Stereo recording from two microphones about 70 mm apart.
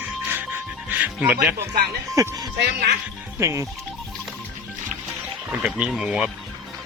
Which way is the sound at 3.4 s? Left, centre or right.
Right.